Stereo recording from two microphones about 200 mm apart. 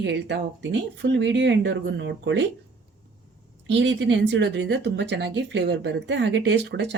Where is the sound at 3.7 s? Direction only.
65° right (ahead or behind).